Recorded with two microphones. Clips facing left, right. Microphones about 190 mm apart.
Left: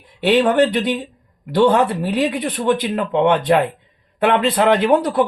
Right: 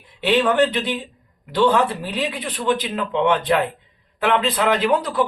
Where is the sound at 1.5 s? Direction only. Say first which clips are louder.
Left 3 dB; 55° left (ahead or behind).